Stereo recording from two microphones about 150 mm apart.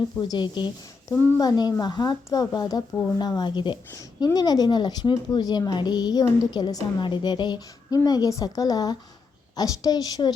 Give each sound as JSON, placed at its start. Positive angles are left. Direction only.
{"t": 0.2, "sound": "speech", "side_deg": 30}